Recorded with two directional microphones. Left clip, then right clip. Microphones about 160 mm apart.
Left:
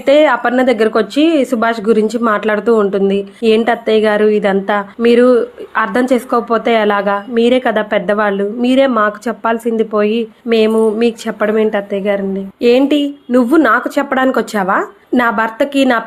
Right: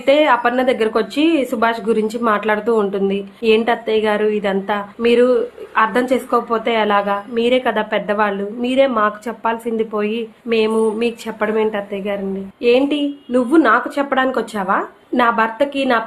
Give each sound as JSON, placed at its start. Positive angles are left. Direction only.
{"t": 0.0, "sound": "a woman's voice", "side_deg": 35}